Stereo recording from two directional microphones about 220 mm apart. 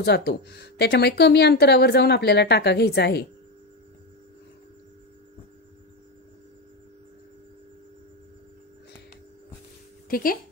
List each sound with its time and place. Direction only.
0.0 s speech: 50° left (ahead or behind)
10.0 s speech: 40° left (ahead or behind)